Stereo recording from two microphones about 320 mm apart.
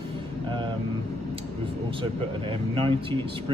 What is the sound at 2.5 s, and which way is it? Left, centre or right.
Speech, centre.